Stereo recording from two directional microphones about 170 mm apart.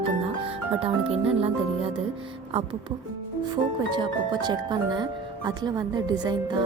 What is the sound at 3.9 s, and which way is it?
Speech, 25° right (ahead or behind).